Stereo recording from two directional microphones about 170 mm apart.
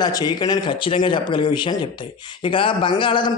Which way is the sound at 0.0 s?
25° left (ahead or behind).